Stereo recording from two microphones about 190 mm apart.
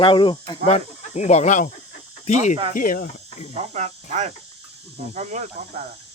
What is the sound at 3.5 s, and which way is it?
Speech, 35° right (ahead or behind).